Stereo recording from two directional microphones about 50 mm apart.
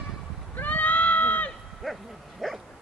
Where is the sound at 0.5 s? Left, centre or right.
Left.